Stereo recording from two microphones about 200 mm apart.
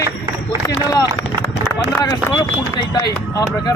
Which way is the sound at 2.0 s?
15° left (ahead or behind).